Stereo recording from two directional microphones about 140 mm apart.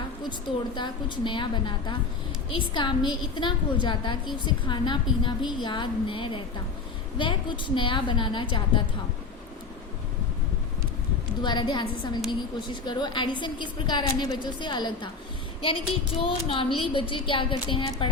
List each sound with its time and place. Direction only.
0.3 s a woman's voice: 35° left (ahead or behind)
11.4 s a woman's voice: 30° left (ahead or behind)